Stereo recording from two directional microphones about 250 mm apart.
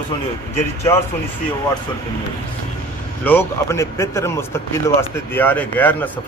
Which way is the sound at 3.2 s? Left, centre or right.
Centre.